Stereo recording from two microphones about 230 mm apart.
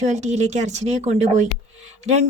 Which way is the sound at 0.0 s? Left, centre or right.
Right.